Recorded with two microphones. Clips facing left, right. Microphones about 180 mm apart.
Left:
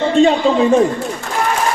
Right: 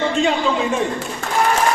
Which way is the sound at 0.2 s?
35° left (ahead or behind).